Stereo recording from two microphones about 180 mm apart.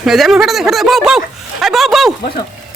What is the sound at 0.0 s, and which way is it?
Speech, centre (ahead or behind).